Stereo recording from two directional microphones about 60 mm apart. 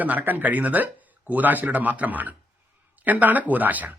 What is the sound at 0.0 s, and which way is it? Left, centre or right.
Speech, right.